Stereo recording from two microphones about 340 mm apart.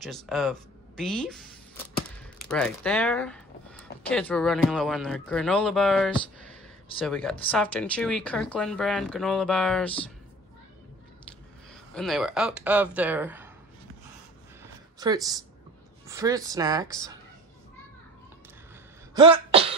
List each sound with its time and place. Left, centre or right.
0.0 s speech: centre
2.4 s speech: centre
11.7 s speech: centre
14.6 s a sound: centre
16.1 s speech: centre
19.1 s sneeze: centre